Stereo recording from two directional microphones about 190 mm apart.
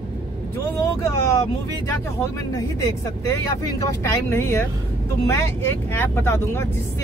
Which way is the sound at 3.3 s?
15° left (ahead or behind).